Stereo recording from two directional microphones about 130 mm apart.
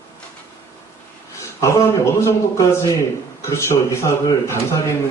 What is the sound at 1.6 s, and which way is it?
Speech, 25° left (ahead or behind).